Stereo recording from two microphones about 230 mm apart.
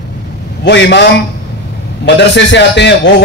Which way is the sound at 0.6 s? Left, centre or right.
Left.